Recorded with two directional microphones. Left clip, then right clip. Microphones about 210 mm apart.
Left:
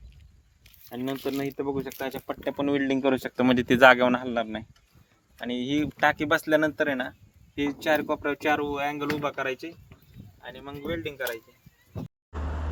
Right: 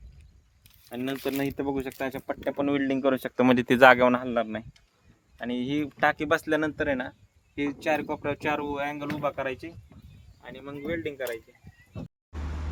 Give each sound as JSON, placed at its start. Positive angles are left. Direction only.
{"t": 1.4, "sound": "speech", "side_deg": -50}
{"t": 2.4, "sound": "speech", "side_deg": -15}